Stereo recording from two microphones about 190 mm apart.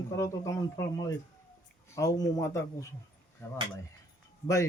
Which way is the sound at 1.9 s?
15° left (ahead or behind).